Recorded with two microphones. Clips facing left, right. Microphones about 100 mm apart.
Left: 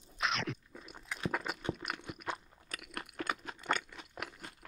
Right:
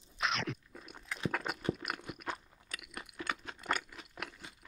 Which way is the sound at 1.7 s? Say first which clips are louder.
Right 1 dB; 5° right (ahead or behind).